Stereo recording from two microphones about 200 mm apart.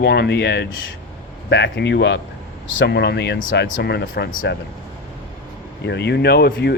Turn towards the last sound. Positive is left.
turn(degrees=55)  # may be behind; listen again after turning